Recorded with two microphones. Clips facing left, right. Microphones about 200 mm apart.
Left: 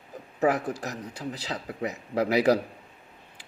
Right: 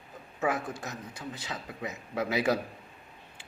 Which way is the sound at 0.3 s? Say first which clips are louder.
Left 6 dB; 35° left (ahead or behind).